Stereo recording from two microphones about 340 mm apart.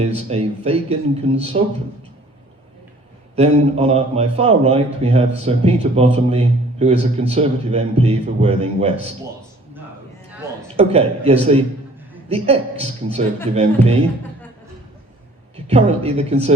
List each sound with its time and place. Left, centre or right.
0.3 s a man's voice: centre
3.3 s a man's voice: centre
10.8 s a man's voice: centre
15.5 s speech: centre